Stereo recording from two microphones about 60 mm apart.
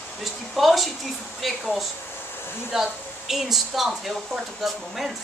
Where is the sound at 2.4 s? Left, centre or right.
Left.